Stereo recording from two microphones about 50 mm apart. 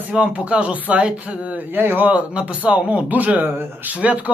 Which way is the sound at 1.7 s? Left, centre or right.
Right.